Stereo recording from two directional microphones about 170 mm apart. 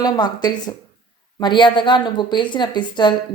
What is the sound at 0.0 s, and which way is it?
A woman's voice, 25° left (ahead or behind).